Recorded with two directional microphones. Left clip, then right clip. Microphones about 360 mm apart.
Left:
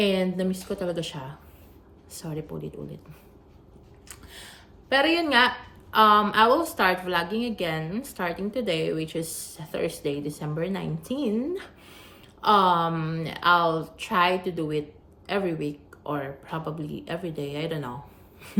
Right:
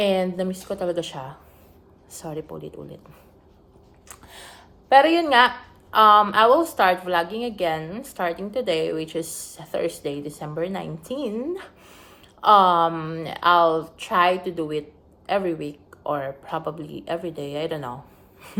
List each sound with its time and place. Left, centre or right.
0.0 s a woman's voice: centre
4.1 s a sound: centre
5.9 s a woman's voice: centre